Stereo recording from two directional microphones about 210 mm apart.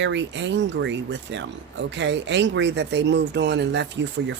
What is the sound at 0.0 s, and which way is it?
Speech, 55° right (ahead or behind).